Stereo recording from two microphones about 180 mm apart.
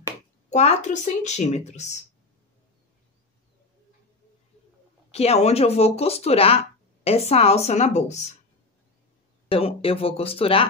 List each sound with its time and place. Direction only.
0.5 s speech: 40° left (ahead or behind)
5.1 s speech: 35° left (ahead or behind)
9.5 s speech: 30° left (ahead or behind)